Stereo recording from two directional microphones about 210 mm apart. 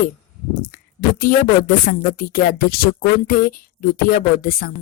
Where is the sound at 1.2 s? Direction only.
40° left (ahead or behind).